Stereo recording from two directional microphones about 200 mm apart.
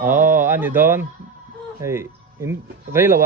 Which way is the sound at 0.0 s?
10° right (ahead or behind).